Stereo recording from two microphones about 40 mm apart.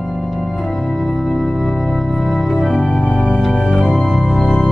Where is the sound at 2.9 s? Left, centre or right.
Left.